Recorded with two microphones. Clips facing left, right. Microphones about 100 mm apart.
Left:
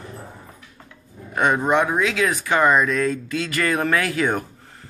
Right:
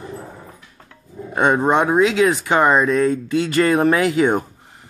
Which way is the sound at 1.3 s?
25° right (ahead or behind).